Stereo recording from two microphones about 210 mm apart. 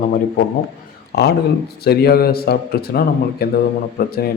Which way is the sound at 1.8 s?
50° left (ahead or behind).